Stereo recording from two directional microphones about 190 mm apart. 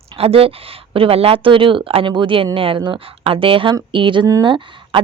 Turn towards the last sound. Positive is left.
turn(degrees=-25)  # may be behind; listen again after turning